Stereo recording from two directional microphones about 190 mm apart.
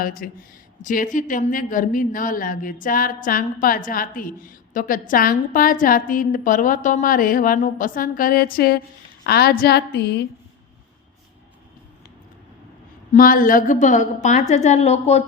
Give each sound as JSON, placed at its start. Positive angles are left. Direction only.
{"t": 0.0, "sound": "a woman's voice", "side_deg": 50}
{"t": 13.1, "sound": "a woman's voice", "side_deg": 45}